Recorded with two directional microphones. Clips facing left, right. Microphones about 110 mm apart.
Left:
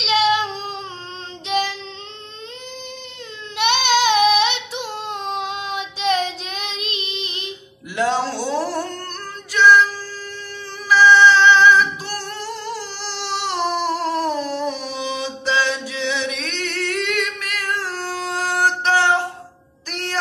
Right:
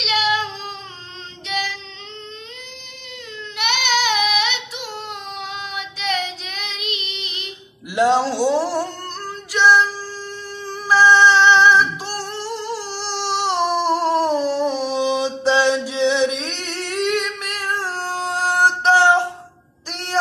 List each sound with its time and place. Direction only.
0.0 s child singing: 25° left (ahead or behind)
1.5 s music: 25° left (ahead or behind)
3.5 s child singing: 30° left (ahead or behind)
7.9 s music: 20° right (ahead or behind)
9.5 s music: 30° right (ahead or behind)
10.9 s music: 30° right (ahead or behind)
12.7 s a sound: 35° right (ahead or behind)